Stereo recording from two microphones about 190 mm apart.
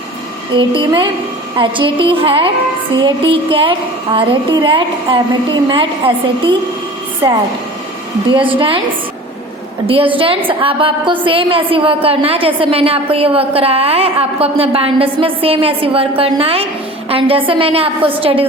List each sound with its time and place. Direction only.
0.5 s a woman's voice: 25° right (ahead or behind)
8.3 s a woman's voice: 25° right (ahead or behind)
9.8 s a woman's voice: 30° right (ahead or behind)